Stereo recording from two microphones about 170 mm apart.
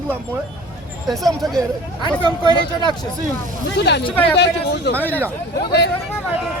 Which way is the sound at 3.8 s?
85° left.